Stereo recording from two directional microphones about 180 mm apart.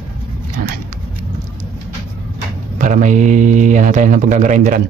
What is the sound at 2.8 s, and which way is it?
Speech, 45° right (ahead or behind).